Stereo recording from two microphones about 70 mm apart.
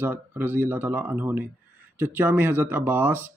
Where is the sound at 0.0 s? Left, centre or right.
Right.